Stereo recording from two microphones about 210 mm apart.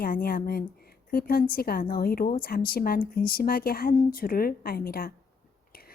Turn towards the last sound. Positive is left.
turn(degrees=45)  # may be behind; listen again after turning